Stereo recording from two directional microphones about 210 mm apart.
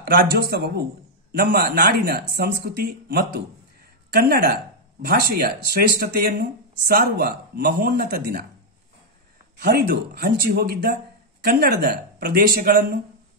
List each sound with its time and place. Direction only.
0.1 s speech: 50° right (ahead or behind)
9.6 s speech: 50° right (ahead or behind)